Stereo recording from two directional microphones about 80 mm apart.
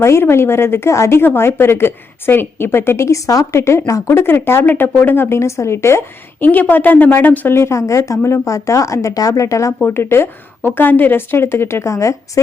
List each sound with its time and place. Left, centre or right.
0.0 s a woman's voice: left
9.8 s a woman's voice: left